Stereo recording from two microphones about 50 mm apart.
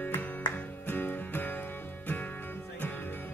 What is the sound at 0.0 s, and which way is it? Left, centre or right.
Music, left.